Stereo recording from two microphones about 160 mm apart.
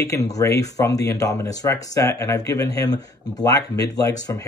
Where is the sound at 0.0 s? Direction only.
20° left (ahead or behind).